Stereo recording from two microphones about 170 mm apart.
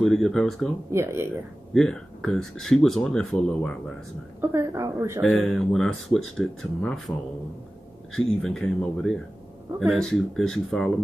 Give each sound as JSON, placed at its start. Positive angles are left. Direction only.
{"t": 0.0, "sound": "speech", "side_deg": 0}
{"t": 0.9, "sound": "a woman's voice", "side_deg": -15}
{"t": 1.7, "sound": "speech", "side_deg": 5}
{"t": 4.4, "sound": "a woman's voice", "side_deg": -15}
{"t": 5.2, "sound": "speech", "side_deg": 0}